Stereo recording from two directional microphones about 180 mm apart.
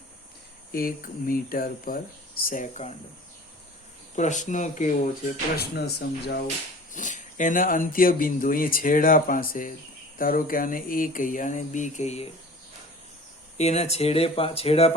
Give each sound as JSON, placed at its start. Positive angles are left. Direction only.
{"t": 0.7, "sound": "speech", "side_deg": 55}
{"t": 4.1, "sound": "speech", "side_deg": 45}
{"t": 5.5, "sound": "speech", "side_deg": 65}
{"t": 6.9, "sound": "speech", "side_deg": 45}
{"t": 13.6, "sound": "speech", "side_deg": 35}